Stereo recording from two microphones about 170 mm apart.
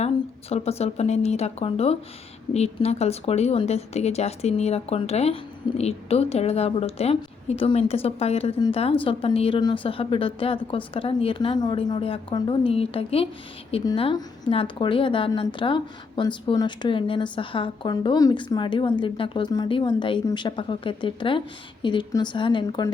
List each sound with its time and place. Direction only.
0.5 s a woman's voice: 40° left (ahead or behind)